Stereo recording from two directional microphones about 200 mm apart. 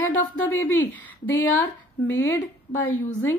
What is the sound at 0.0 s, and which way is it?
A woman's voice, 15° left (ahead or behind).